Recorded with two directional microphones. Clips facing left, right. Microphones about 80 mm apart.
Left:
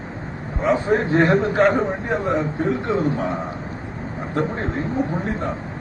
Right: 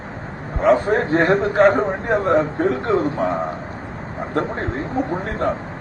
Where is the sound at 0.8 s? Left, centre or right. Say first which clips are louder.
Even; right.